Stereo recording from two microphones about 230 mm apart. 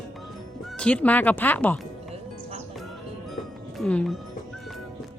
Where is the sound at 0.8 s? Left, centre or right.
Centre.